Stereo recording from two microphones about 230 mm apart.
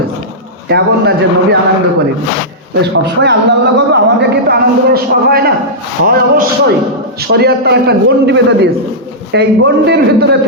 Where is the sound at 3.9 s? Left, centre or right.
Right.